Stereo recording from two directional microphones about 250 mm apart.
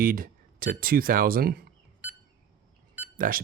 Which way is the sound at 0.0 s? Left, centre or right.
Right.